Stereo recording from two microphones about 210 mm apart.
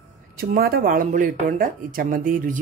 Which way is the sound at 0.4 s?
45° right (ahead or behind).